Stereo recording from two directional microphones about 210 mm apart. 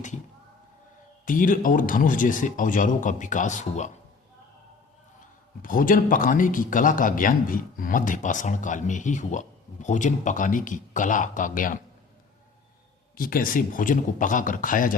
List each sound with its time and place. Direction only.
1.2 s speech: 40° left (ahead or behind)
5.6 s speech: 40° left (ahead or behind)
13.1 s speech: 45° left (ahead or behind)